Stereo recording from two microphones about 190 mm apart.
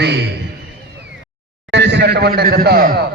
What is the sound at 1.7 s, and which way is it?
A man's voice, 65° right (ahead or behind).